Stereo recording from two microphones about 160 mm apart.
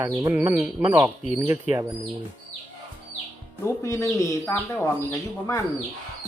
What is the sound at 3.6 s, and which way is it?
Speech, 20° left (ahead or behind).